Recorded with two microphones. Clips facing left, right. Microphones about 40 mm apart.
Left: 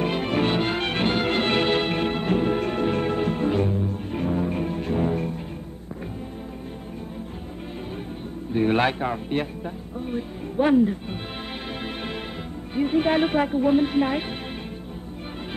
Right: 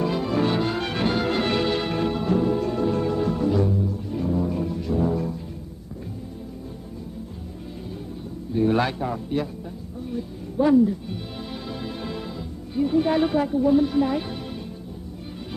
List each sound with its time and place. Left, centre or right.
0.0 s music: left
8.5 s a man's voice: left
11.8 s music: left
12.7 s speech: left